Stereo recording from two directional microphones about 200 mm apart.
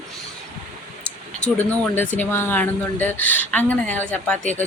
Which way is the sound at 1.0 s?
5° left (ahead or behind).